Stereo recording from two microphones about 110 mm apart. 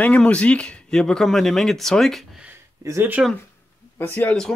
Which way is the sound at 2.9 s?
20° right (ahead or behind).